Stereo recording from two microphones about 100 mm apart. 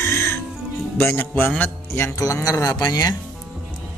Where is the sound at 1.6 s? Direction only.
30° left (ahead or behind).